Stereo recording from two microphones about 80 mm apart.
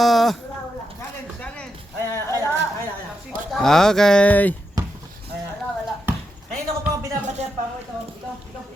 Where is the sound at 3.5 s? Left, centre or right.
Centre; by 4.6 s left.